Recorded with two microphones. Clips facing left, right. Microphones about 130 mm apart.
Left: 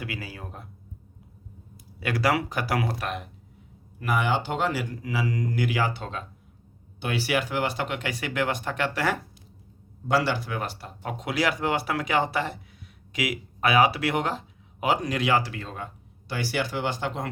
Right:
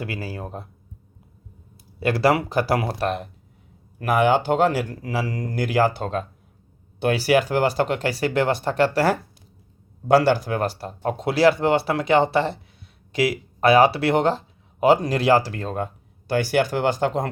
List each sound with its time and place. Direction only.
0.0 s speech: 35° right (ahead or behind)
2.0 s speech: 30° right (ahead or behind)
4.0 s speech: 50° right (ahead or behind); by 9.1 s 35° right (ahead or behind)
10.1 s speech: 45° right (ahead or behind)